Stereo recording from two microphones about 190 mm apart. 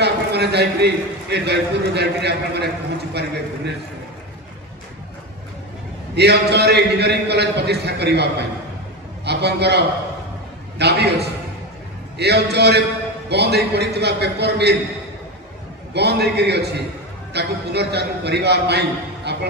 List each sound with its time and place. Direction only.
0.0 s a man's voice: 60° right (ahead or behind)
6.1 s a man's voice: 60° right (ahead or behind)
15.9 s a man's voice: 60° right (ahead or behind)